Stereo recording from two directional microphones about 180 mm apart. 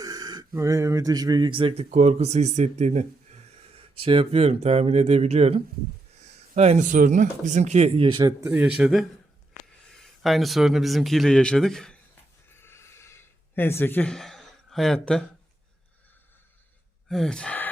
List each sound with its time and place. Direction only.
0.0 s speech: 20° right (ahead or behind)
8.4 s a man's voice: 10° right (ahead or behind)
12.5 s a sound: 15° left (ahead or behind)
17.1 s speech: 5° left (ahead or behind)